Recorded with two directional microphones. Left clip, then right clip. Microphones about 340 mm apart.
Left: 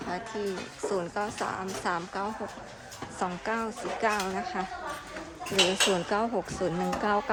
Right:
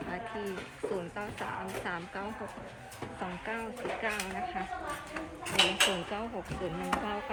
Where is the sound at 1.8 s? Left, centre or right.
Centre.